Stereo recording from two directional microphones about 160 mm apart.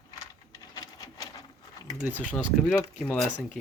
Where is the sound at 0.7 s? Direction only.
25° left (ahead or behind).